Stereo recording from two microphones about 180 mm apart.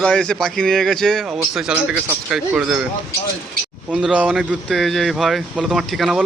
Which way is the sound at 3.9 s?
5° right (ahead or behind).